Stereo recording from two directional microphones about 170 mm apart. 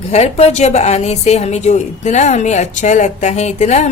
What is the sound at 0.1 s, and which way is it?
A woman's voice, 40° left (ahead or behind).